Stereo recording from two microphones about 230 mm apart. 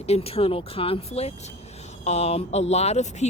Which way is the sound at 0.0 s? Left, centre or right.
Left.